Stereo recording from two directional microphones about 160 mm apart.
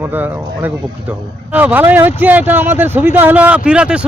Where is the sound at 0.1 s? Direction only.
10° right (ahead or behind).